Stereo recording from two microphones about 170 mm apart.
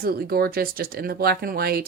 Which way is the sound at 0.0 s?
65° right (ahead or behind).